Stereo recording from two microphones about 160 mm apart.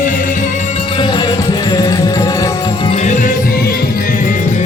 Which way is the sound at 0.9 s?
30° left (ahead or behind).